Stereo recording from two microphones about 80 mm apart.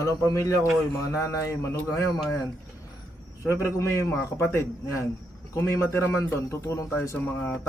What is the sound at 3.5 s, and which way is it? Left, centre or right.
Speech, left.